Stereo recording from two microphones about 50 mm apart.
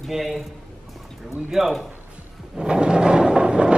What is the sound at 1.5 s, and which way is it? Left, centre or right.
Speech, centre.